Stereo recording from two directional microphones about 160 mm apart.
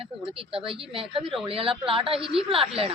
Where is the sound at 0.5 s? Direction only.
35° right (ahead or behind).